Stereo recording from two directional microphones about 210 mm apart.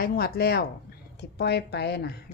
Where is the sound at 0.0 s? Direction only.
45° left (ahead or behind).